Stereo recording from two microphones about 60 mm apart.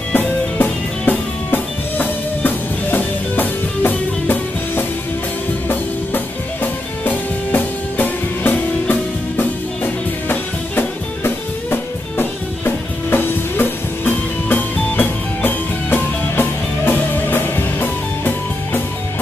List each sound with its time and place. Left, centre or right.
0.1 s music: left
10.2 s music: left